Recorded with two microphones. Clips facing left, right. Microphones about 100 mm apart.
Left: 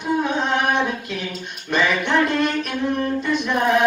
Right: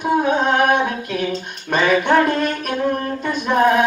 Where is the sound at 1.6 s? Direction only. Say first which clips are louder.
Right 4 dB; 45° right (ahead or behind).